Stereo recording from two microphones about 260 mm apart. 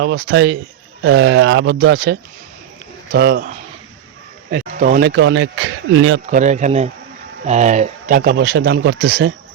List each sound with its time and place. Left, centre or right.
0.0 s speech: right
4.5 s speech: right
6.3 s speech: right